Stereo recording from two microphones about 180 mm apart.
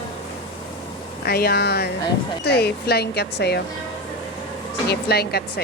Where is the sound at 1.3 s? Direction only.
60° left (ahead or behind).